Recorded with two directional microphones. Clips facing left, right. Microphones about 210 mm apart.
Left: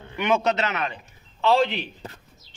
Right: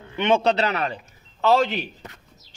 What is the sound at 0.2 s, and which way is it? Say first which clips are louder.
A man's voice: right 3 dB; 30° right (ahead or behind).